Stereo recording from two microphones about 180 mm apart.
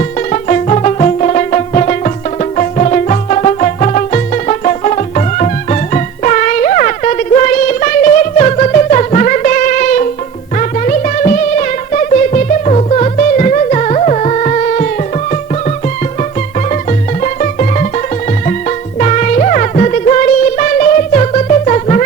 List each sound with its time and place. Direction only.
0.3 s music: 40° left (ahead or behind)
17.4 s music: 45° left (ahead or behind)
18.9 s music: 45° left (ahead or behind)